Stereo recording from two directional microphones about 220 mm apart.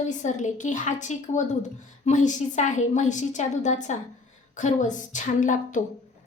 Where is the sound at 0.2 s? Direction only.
35° left (ahead or behind).